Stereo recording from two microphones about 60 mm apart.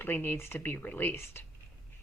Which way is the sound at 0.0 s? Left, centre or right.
Left.